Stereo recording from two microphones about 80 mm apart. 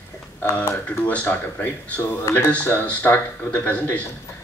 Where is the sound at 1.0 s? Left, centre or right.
Centre.